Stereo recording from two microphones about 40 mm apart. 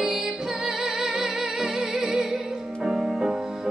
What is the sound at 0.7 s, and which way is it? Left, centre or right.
Music, centre.